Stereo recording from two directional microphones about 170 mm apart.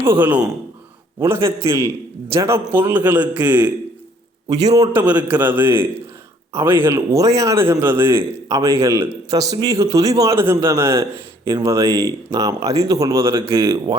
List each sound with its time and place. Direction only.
0.0 s a man's voice: 10° right (ahead or behind)
4.4 s speech: 20° right (ahead or behind)
4.9 s a man's voice: 10° right (ahead or behind)